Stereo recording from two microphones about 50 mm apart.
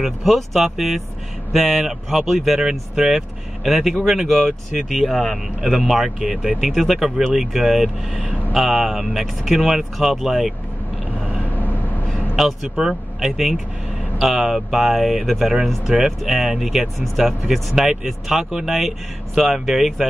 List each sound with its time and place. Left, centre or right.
0.0 s speech: centre
11.5 s vehicle: left
12.4 s speech: centre